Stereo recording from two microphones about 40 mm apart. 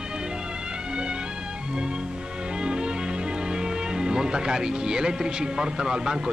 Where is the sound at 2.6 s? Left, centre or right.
Right.